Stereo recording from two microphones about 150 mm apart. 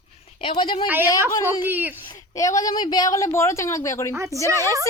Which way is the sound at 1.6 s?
15° right (ahead or behind).